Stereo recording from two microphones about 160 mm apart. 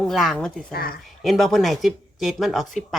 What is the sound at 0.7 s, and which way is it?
Speech, 70° left (ahead or behind).